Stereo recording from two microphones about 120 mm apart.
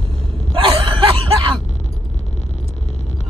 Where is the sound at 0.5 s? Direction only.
45° right (ahead or behind).